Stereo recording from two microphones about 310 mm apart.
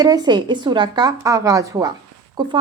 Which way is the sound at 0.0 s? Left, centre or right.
Centre.